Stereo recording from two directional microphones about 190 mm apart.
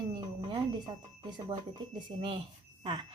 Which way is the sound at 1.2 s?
25° right (ahead or behind).